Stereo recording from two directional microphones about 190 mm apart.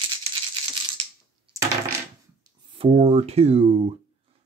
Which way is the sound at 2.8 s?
35° right (ahead or behind).